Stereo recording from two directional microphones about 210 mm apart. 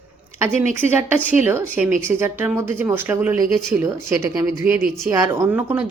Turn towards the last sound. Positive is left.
turn(degrees=-10)  # may be behind; listen again after turning